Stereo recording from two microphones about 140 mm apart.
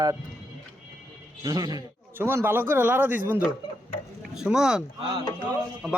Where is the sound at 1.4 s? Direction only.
30° right (ahead or behind).